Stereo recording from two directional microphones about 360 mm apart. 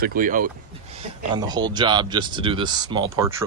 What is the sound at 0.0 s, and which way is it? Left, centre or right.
Speech, right.